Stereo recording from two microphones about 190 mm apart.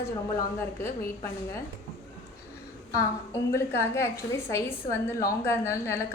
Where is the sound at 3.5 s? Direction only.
15° left (ahead or behind).